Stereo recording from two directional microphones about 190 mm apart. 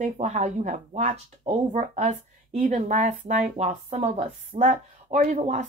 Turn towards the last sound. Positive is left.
turn(degrees=-35)  # may be behind; listen again after turning